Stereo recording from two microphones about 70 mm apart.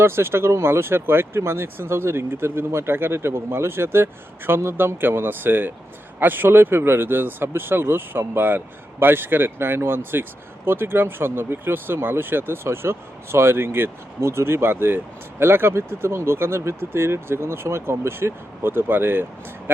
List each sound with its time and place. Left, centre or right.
0.0 s speech: right